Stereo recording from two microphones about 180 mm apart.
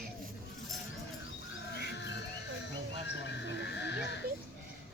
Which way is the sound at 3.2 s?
75° left (ahead or behind).